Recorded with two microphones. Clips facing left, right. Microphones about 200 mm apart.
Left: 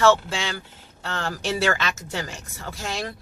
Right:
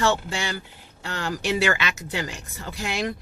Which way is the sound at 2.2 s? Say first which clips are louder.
Right 1 dB; 15° right (ahead or behind).